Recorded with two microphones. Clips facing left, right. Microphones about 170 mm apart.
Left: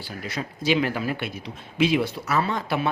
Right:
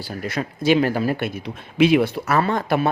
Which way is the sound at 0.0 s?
45° right (ahead or behind).